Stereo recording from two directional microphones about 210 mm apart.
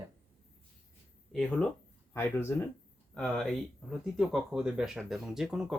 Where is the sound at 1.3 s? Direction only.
5° left (ahead or behind).